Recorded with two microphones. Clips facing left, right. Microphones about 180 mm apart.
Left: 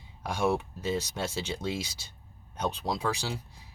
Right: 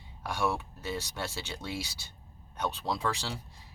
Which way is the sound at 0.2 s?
15° left (ahead or behind).